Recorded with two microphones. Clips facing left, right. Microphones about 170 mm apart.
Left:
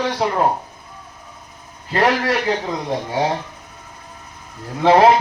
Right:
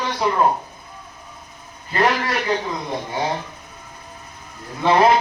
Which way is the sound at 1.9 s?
90° left.